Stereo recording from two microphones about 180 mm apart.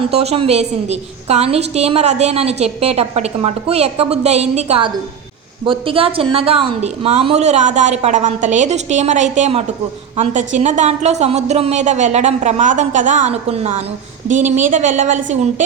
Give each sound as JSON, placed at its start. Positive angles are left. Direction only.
{"t": 0.0, "sound": "a woman's voice", "side_deg": -35}